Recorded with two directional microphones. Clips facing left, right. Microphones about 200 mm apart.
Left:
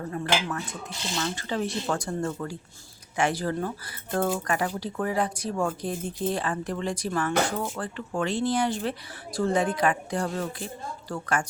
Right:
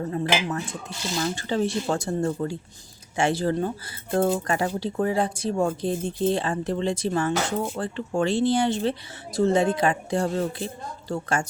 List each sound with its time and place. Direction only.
1.1 s speech: 30° right (ahead or behind)